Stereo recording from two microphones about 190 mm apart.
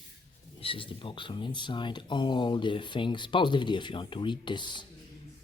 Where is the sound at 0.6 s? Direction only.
30° left (ahead or behind).